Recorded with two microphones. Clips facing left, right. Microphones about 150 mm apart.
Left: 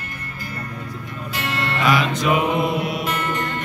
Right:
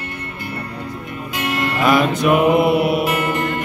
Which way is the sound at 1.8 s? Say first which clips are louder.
Right 5 dB; 50° right (ahead or behind).